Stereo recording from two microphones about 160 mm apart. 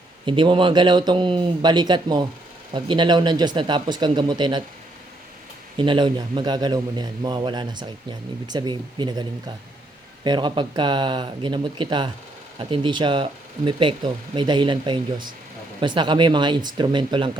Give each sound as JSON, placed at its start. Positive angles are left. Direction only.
{"t": 0.3, "sound": "a man's voice", "side_deg": -30}
{"t": 5.7, "sound": "a man's voice", "side_deg": -30}
{"t": 10.2, "sound": "a man's voice", "side_deg": -30}